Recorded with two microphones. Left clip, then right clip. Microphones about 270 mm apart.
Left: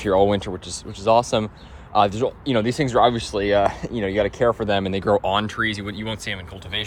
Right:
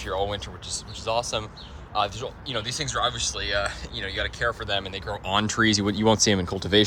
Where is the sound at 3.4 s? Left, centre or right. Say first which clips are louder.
Left 12 dB; left.